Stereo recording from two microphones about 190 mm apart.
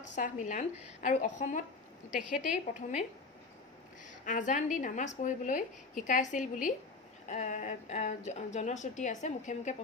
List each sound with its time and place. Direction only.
0.1 s a woman's voice: 40° left (ahead or behind)
4.3 s a woman's voice: 40° left (ahead or behind)